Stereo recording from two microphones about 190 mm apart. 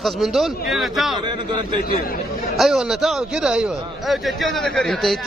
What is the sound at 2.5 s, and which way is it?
A man's voice, 5° right (ahead or behind).